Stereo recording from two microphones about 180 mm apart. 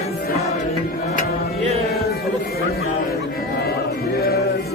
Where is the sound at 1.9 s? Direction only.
60° left (ahead or behind).